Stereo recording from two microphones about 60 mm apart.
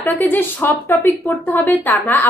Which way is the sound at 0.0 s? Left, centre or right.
Left.